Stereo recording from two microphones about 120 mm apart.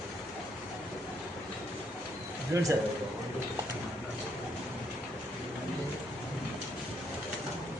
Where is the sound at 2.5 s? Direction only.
25° right (ahead or behind).